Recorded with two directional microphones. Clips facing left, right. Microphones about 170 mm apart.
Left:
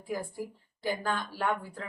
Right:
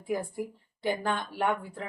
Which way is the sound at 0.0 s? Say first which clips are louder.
Right 3 dB; 20° right (ahead or behind).